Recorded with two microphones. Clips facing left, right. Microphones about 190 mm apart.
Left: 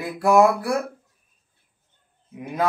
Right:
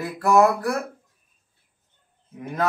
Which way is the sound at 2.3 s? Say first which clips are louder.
Left 1 dB; 10° left (ahead or behind).